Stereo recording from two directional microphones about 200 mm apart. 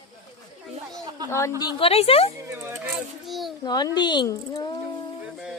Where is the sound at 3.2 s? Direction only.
Centre (ahead or behind).